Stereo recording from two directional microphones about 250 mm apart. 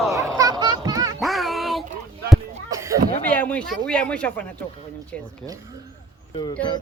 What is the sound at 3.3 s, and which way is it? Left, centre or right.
Speech, centre.